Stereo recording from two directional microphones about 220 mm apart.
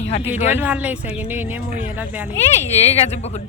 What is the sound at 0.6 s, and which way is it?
Speech, 5° right (ahead or behind).